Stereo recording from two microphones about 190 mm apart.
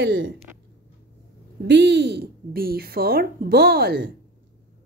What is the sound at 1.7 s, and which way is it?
Speech, 65° right (ahead or behind).